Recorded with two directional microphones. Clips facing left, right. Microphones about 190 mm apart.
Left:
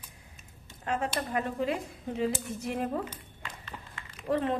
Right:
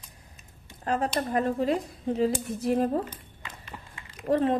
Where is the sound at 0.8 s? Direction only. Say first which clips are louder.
Right 4 dB; 40° right (ahead or behind).